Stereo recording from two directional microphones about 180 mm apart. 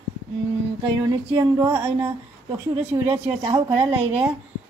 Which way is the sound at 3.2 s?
30° right (ahead or behind).